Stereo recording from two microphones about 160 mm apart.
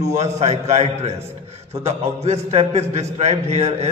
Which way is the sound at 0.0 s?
45° right (ahead or behind).